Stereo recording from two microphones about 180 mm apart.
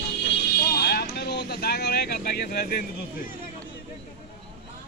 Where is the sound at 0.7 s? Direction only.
65° left (ahead or behind).